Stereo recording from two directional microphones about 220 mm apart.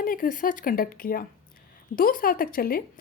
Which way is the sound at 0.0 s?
40° left (ahead or behind).